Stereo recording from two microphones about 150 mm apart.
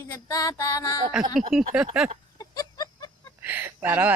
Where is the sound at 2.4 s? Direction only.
25° left (ahead or behind).